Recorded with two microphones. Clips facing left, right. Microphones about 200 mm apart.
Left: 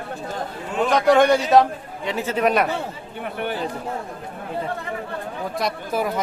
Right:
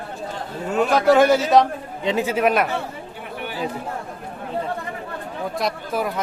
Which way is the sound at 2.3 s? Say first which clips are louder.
Left 2 dB; centre (ahead or behind).